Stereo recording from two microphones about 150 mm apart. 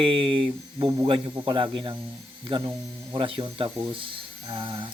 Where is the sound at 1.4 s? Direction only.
35° right (ahead or behind).